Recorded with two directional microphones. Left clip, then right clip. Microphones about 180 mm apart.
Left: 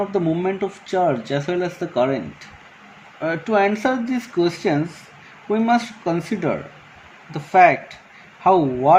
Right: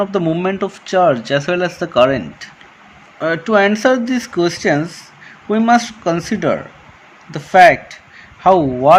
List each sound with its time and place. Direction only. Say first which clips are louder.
0.0 s speech: right 4 dB; 40° right (ahead or behind)